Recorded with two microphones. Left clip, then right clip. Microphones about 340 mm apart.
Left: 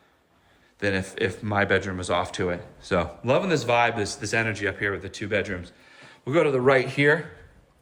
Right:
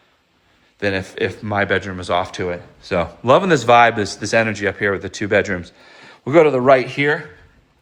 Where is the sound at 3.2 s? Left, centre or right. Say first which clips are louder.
Right 12 dB; centre.